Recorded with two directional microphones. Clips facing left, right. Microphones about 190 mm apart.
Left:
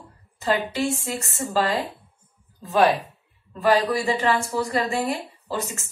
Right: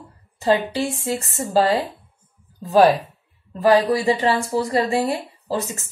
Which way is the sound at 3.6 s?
35° right (ahead or behind).